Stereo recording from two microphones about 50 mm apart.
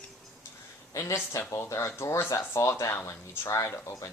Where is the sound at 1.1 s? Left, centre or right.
Left.